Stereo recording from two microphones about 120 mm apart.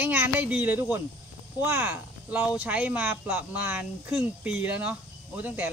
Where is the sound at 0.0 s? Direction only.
15° right (ahead or behind).